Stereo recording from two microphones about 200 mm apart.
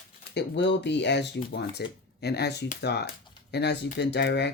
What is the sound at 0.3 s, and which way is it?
Speech, 60° left (ahead or behind).